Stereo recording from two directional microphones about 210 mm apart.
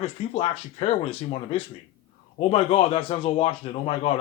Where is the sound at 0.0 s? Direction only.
30° left (ahead or behind).